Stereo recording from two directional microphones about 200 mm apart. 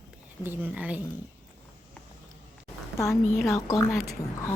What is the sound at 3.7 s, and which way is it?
Speech, 15° left (ahead or behind).